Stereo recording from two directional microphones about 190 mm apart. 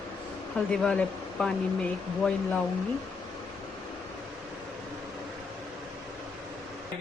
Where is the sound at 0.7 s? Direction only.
5° left (ahead or behind).